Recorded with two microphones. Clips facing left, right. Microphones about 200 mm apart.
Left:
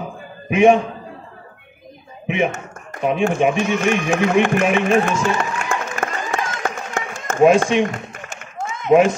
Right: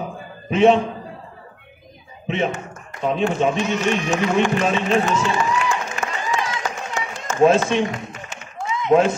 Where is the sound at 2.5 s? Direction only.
50° left (ahead or behind).